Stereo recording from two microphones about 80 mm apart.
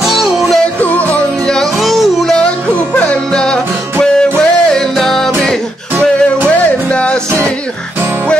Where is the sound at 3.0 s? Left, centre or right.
Centre.